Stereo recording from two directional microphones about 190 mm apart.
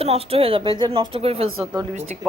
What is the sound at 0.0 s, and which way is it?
A woman's voice, 30° right (ahead or behind).